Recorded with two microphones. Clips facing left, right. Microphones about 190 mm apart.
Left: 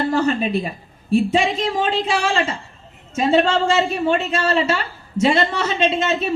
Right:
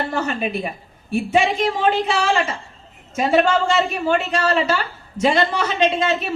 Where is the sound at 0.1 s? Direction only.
30° left (ahead or behind).